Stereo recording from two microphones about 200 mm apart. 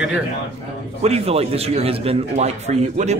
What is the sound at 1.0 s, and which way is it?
A man's voice, 30° right (ahead or behind).